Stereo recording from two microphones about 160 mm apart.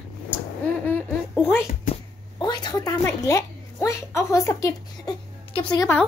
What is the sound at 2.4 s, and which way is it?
A woman's voice, 25° left (ahead or behind).